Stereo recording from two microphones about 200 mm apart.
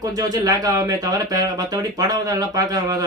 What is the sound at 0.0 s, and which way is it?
Speech, 20° right (ahead or behind).